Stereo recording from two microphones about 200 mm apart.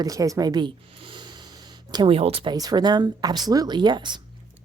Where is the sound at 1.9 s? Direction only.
25° right (ahead or behind).